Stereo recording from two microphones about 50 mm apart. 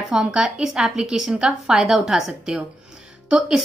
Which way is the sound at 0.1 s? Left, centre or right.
Centre.